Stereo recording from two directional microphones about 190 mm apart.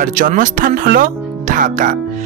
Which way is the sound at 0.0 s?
45° right (ahead or behind).